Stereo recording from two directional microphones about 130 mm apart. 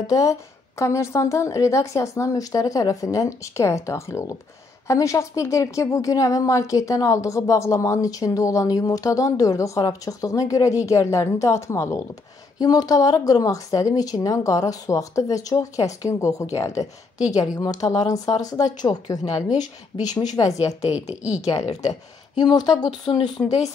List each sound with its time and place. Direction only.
0.0 s a woman's voice: 25° left (ahead or behind)
20.9 s a woman's voice: 10° right (ahead or behind)
22.4 s speech: 35° left (ahead or behind)